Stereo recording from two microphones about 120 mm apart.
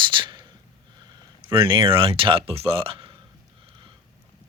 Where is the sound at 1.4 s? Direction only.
45° right (ahead or behind).